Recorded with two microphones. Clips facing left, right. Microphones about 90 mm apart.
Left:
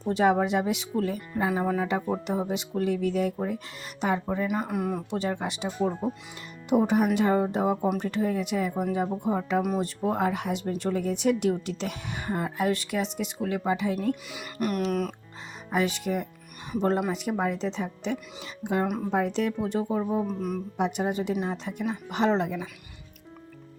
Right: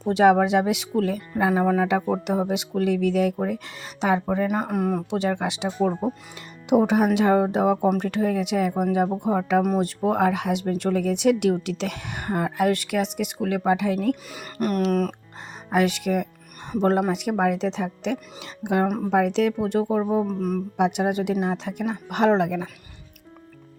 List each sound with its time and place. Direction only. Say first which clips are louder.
0.0 s speech: right 6 dB; 80° right
4.4 s speech: right 4 dB; 50° right (ahead or behind)
5.1 s speech: right 5 dB; 75° right (ahead or behind)
14.3 s speech: right 3 dB; 40° right (ahead or behind)
15.7 s speech: right 5 dB; 70° right (ahead or behind)
20.2 s speech: right 4 dB; 45° right (ahead or behind)
20.7 s speech: right 5 dB; 75° right (ahead or behind); by 22.7 s 60° right (ahead or behind)